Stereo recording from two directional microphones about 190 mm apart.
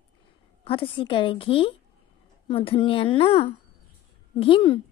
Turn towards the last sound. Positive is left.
turn(degrees=25)  # may be behind; listen again after turning